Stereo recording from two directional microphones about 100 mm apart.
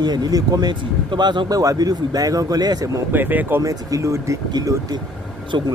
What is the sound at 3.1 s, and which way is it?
Speech, 20° right (ahead or behind).